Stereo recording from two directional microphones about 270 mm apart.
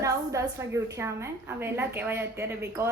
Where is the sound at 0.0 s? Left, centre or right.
Centre.